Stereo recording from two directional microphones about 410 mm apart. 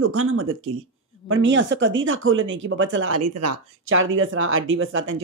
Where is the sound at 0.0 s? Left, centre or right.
Right.